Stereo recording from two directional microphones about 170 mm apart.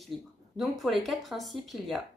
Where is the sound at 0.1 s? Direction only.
Centre (ahead or behind).